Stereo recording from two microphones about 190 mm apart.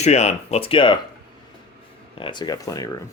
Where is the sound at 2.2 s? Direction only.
25° left (ahead or behind).